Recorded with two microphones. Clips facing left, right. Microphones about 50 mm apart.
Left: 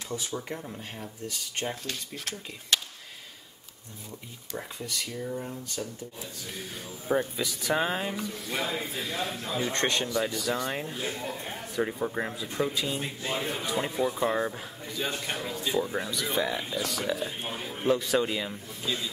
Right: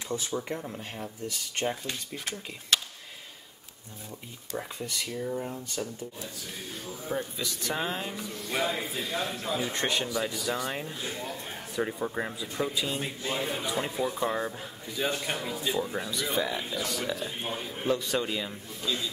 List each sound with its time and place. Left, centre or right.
0.3 s speech: centre
1.9 s speech: centre
4.6 s speech: centre
7.3 s a man's voice: centre
8.2 s speech: centre
15.0 s a man's voice: centre